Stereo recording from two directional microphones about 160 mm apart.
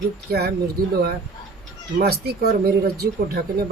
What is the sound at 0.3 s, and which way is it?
Speech, 80° right.